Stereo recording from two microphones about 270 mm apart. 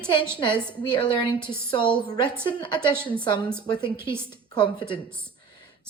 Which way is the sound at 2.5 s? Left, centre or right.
Centre.